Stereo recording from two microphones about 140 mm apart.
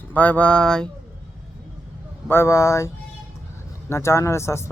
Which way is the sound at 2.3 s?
20° left (ahead or behind).